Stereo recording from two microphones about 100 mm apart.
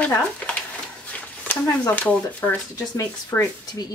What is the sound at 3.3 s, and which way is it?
Speech, 35° left (ahead or behind).